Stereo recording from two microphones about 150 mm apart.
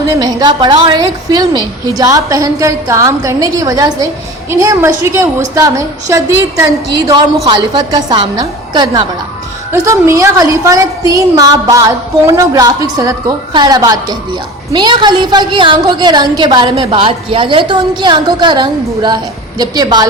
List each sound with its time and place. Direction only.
0.1 s a woman's voice: 25° right (ahead or behind)
7.0 s a woman's voice: 30° right (ahead or behind)
9.8 s a woman's voice: 20° right (ahead or behind)